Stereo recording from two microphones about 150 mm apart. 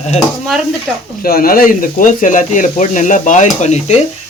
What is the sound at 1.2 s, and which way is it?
Speech, 75° left (ahead or behind).